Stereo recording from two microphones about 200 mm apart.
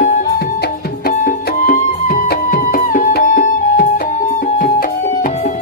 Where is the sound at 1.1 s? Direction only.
45° left (ahead or behind).